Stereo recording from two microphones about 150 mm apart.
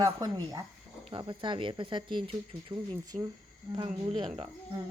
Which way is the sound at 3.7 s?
40° right (ahead or behind).